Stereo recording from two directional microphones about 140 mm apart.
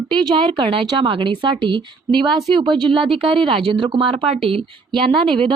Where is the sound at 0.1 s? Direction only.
35° right (ahead or behind).